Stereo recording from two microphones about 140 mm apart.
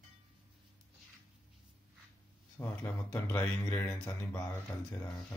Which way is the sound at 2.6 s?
20° left (ahead or behind).